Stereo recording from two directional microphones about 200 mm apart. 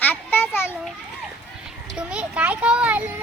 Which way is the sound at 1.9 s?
5° right (ahead or behind).